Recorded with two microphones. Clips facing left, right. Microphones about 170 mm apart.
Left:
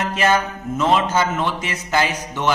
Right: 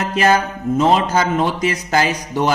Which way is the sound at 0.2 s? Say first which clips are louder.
Right 4 dB; 35° right (ahead or behind).